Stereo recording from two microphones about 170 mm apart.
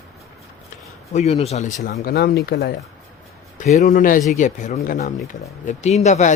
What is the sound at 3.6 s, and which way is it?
Speech, 45° left (ahead or behind).